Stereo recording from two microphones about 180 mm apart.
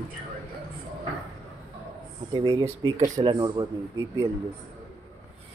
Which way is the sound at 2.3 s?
20° right (ahead or behind).